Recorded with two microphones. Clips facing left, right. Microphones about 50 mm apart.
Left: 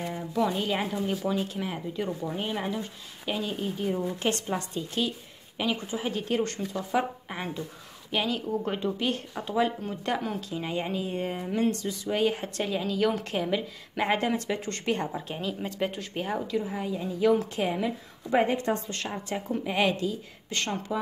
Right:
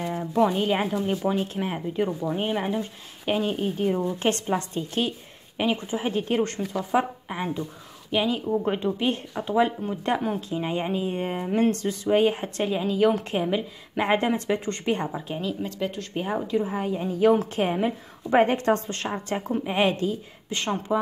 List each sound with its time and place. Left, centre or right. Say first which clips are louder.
0.1 s a sound: right 6 dB; right
0.5 s speech: right 5 dB; right
5.6 s speech: right 4 dB; right
7.2 s speech: right 5 dB; centre; by 12.1 s right
12.1 s speech: right 6 dB; right
15.1 s speech: right 3 dB; centre
15.6 s speech: right 1 dB; centre
16.3 s speech: right 6 dB; right
16.7 s speech: right 4 dB; right
19.6 s speech: right 2 dB; right
20.4 s speech: right 4 dB; centre